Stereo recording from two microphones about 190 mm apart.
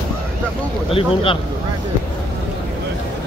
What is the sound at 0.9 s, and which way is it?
Speech, 30° left (ahead or behind).